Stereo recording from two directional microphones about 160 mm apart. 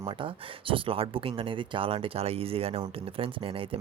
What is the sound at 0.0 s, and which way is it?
Speech, 35° right (ahead or behind).